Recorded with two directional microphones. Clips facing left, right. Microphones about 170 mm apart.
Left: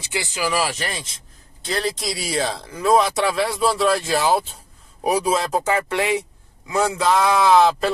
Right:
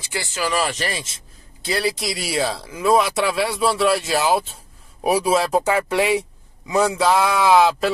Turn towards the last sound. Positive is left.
turn(degrees=-5)  # may be behind; listen again after turning